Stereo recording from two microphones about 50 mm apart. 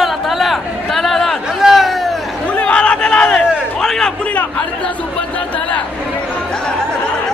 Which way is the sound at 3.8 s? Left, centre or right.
Centre.